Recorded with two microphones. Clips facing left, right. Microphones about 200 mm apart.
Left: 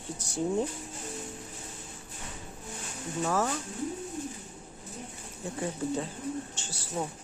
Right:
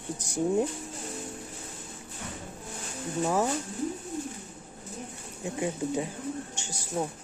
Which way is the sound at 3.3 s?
15° right (ahead or behind).